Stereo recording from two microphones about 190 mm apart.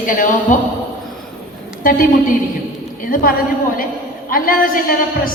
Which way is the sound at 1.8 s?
45° left (ahead or behind).